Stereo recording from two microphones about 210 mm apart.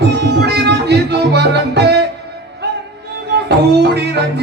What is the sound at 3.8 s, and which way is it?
Music, 55° right (ahead or behind).